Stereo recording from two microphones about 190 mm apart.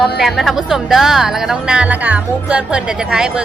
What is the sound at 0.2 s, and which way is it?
A woman's voice, centre (ahead or behind).